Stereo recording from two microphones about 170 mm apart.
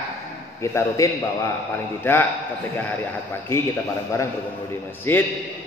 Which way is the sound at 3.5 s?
15° left (ahead or behind).